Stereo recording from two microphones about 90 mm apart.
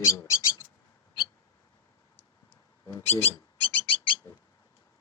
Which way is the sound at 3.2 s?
90° left.